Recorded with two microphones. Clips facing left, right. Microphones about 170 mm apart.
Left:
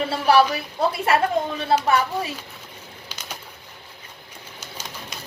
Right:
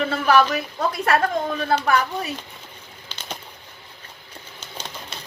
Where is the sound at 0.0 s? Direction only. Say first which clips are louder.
Left 1 dB; 35° left (ahead or behind).